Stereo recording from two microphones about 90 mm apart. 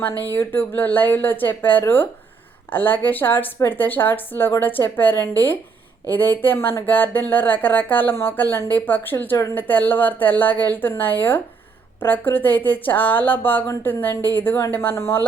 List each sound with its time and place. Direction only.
0.2 s speech: 25° left (ahead or behind)